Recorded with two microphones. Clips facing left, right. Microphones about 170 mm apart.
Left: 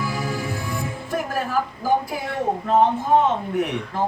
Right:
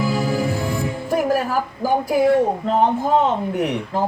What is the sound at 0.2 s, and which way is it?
Music, 70° right (ahead or behind).